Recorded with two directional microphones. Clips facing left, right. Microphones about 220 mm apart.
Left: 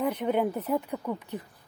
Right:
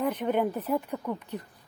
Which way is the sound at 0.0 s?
10° left (ahead or behind).